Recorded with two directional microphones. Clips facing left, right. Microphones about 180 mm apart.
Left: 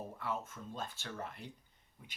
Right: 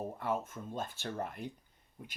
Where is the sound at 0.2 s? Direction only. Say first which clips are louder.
Right 3 dB; 50° right (ahead or behind).